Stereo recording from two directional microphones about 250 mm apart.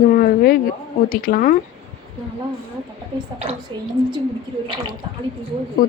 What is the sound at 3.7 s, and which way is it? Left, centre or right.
Speech, centre.